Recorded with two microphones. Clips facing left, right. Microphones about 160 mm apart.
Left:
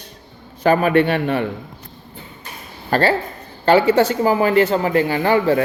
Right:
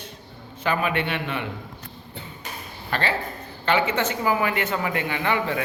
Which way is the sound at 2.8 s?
40° left (ahead or behind).